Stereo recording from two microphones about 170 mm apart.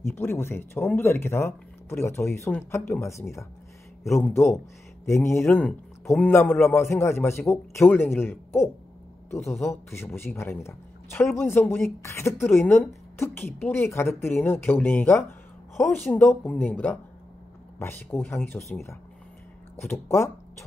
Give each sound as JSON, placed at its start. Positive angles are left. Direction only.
{"t": 0.0, "sound": "a man's voice", "side_deg": 15}